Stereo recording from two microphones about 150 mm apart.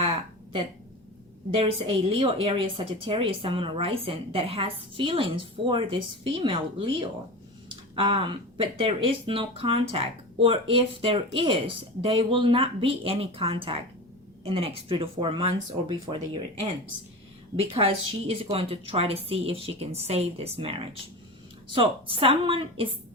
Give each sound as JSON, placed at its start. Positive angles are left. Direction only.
{"t": 1.5, "sound": "speech", "side_deg": -40}
{"t": 7.9, "sound": "speech", "side_deg": -35}